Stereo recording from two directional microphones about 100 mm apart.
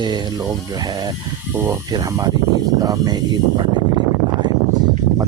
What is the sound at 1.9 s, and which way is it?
Speech, 35° right (ahead or behind).